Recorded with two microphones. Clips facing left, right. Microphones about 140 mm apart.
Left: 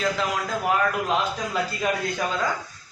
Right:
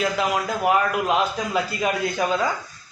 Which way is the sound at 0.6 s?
10° right (ahead or behind).